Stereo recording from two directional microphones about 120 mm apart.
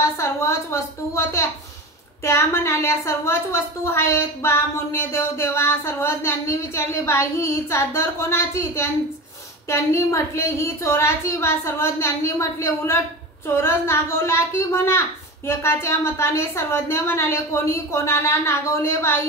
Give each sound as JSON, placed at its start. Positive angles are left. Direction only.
{"t": 0.0, "sound": "a woman's voice", "side_deg": 25}